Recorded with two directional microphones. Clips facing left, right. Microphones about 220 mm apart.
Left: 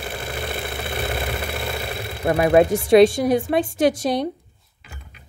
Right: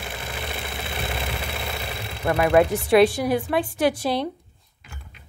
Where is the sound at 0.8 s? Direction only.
50° left (ahead or behind).